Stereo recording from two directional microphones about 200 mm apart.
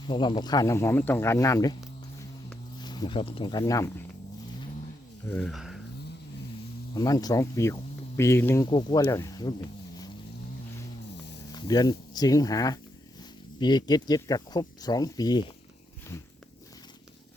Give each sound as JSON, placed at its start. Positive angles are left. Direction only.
{"t": 0.1, "sound": "speech", "side_deg": 25}
{"t": 2.8, "sound": "speech", "side_deg": 20}
{"t": 5.2, "sound": "speech", "side_deg": 5}
{"t": 6.9, "sound": "speech", "side_deg": 20}
{"t": 11.5, "sound": "speech", "side_deg": 20}